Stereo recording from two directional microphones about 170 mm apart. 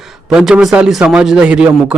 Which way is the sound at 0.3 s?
5° right (ahead or behind).